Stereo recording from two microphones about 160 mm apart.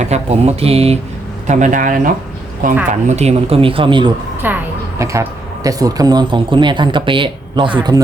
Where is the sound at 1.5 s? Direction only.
50° right (ahead or behind); by 4.1 s 30° right (ahead or behind).